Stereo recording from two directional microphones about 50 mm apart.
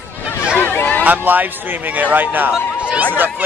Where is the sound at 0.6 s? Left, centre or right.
Left.